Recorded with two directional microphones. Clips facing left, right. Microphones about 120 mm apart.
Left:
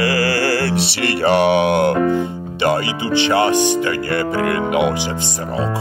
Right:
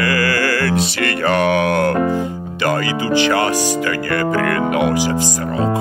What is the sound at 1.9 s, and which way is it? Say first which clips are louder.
Speech: left 1 dB; 40° right (ahead or behind).